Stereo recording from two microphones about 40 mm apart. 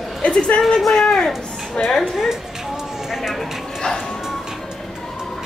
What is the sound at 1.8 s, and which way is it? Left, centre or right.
Speech, left.